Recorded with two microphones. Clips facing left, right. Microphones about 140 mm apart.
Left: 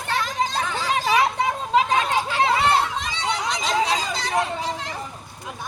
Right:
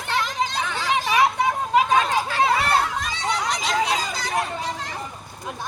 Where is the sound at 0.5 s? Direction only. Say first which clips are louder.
Even; 40° left (ahead or behind).